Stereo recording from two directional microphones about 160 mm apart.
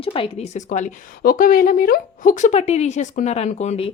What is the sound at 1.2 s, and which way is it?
A woman's voice, 60° left (ahead or behind).